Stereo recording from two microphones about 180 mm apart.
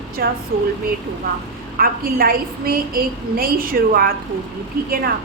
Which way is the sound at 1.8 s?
55° right (ahead or behind).